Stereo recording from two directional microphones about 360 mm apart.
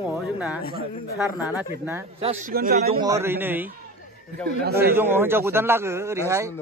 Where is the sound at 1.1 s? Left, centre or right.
Centre; by 3.0 s right.